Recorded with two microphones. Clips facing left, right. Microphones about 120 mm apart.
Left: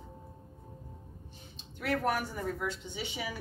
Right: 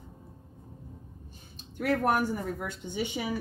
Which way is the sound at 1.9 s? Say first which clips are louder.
Right 5 dB; 50° right (ahead or behind).